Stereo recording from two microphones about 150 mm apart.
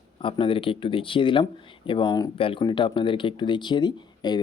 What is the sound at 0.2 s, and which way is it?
Speech, 35° left (ahead or behind).